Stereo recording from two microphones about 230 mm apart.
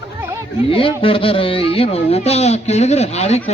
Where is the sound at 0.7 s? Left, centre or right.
Left.